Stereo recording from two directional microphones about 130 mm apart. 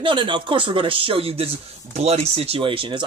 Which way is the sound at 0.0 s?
40° right (ahead or behind).